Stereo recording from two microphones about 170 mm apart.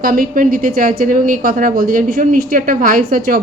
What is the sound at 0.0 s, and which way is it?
A woman's voice, 55° right (ahead or behind).